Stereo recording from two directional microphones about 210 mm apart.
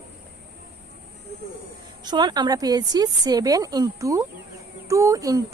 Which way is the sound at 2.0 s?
20° right (ahead or behind).